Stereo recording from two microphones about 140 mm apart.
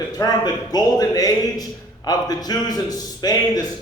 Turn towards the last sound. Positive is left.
turn(degrees=25)  # may be behind; listen again after turning